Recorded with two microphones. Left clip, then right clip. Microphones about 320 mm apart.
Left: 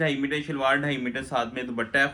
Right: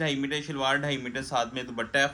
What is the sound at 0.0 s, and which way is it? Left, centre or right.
A man's voice, right.